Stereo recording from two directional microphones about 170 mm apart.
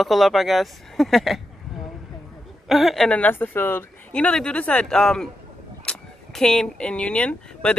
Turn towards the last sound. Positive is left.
turn(degrees=5)  # may be behind; listen again after turning